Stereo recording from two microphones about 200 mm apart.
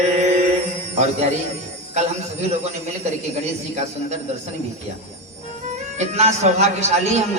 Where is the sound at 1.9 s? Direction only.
35° right (ahead or behind).